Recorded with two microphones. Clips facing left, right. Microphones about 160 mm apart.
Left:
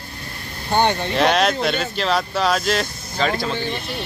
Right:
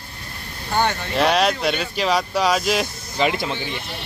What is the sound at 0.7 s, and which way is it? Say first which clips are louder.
Speech: left 3 dB; 20° left (ahead or behind).